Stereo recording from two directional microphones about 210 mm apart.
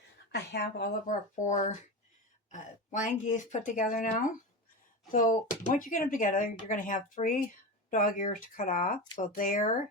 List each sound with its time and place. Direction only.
0.3 s speech: 50° left (ahead or behind)
1.0 s speech: 35° left (ahead or behind)